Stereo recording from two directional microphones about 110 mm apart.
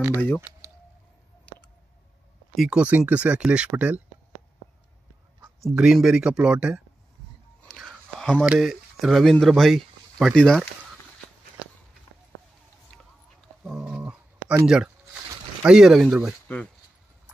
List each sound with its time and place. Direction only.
0.1 s speech: 20° left (ahead or behind)
2.5 s speech: 5° right (ahead or behind)
5.7 s speech: 5° right (ahead or behind)
7.6 s a sound: centre (ahead or behind)
8.5 s speech: centre (ahead or behind)
13.7 s a sound: 5° right (ahead or behind)
15.6 s speech: 5° right (ahead or behind)